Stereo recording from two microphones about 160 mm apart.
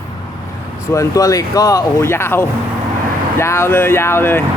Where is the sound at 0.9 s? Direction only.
20° left (ahead or behind).